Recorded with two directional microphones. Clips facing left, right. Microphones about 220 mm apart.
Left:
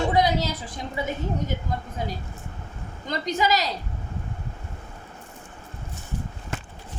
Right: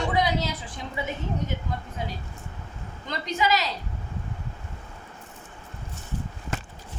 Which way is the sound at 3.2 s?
40° left (ahead or behind).